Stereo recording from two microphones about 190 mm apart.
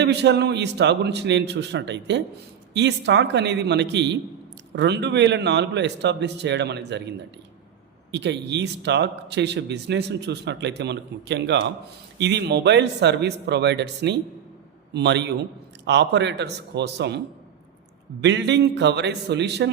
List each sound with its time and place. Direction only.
0.0 s a man's voice: 65° right (ahead or behind)
8.1 s a man's voice: 65° right (ahead or behind)
18.2 s a man's voice: 65° right (ahead or behind)